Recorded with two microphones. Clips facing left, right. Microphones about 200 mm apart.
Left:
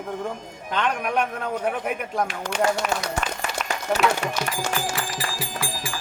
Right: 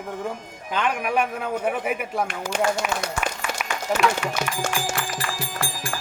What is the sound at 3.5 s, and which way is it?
Run, 50° right (ahead or behind).